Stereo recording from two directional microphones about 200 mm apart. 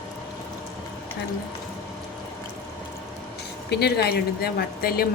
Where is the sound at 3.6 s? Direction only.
55° left (ahead or behind).